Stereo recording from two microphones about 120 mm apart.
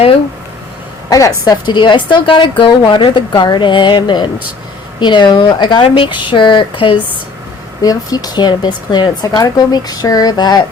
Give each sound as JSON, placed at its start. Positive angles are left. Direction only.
{"t": 1.1, "sound": "a woman's voice", "side_deg": 30}
{"t": 7.8, "sound": "a woman's voice", "side_deg": 30}